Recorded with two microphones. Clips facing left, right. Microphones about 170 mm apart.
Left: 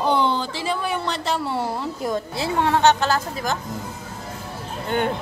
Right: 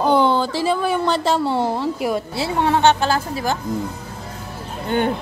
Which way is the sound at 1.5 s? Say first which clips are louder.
Right 5 dB; 20° right (ahead or behind).